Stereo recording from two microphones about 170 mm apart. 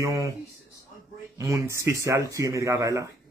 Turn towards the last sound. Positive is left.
turn(degrees=-20)  # may be behind; listen again after turning